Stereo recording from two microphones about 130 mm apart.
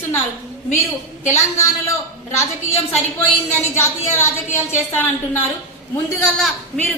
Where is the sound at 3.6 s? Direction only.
20° left (ahead or behind).